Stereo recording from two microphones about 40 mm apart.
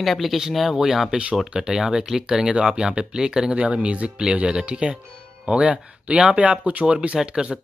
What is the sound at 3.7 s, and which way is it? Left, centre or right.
Speech, right.